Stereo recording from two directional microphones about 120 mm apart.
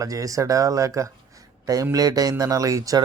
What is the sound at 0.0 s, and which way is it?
Speech, 30° right (ahead or behind).